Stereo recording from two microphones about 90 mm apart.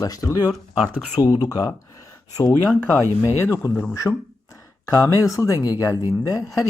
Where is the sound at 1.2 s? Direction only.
45° left (ahead or behind).